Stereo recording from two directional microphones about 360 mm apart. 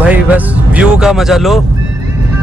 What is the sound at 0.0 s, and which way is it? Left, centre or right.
Speech, centre.